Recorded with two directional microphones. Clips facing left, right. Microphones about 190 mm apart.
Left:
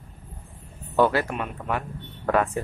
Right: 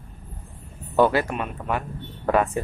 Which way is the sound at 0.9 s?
15° right (ahead or behind).